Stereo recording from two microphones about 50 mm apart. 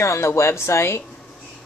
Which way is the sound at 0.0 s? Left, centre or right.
Left.